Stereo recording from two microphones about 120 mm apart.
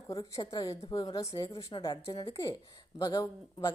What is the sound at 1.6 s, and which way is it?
A woman's voice, 40° left (ahead or behind).